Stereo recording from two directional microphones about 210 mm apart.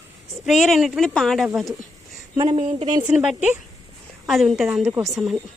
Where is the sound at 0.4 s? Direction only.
Centre (ahead or behind).